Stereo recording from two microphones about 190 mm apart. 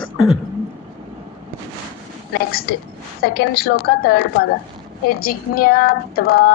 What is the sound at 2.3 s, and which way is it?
Female singing, 55° left (ahead or behind).